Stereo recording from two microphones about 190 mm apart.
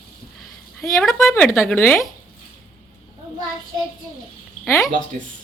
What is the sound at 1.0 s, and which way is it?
A child's voice, centre (ahead or behind).